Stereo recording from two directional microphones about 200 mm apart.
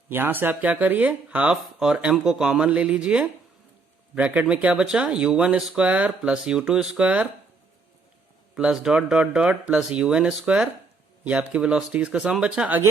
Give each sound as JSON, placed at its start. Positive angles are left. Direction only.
{"t": 0.1, "sound": "speech", "side_deg": -10}
{"t": 8.5, "sound": "speech", "side_deg": -5}